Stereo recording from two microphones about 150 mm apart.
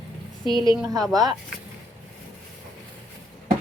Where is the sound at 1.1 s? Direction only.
25° right (ahead or behind).